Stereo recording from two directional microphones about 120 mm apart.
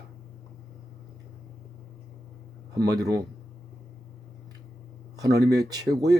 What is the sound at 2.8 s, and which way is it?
Speech, 35° right (ahead or behind).